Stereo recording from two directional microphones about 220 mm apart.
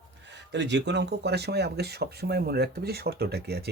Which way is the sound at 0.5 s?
55° right (ahead or behind).